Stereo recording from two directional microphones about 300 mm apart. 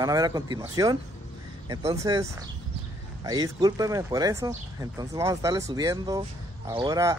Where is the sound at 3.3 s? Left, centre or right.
Centre.